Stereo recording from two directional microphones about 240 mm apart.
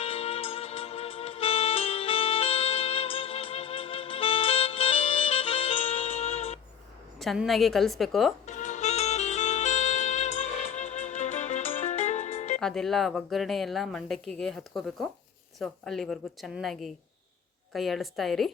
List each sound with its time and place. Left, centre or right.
0.0 s music: left
7.2 s a woman's voice: centre
8.4 s music: left
12.5 s a woman's voice: centre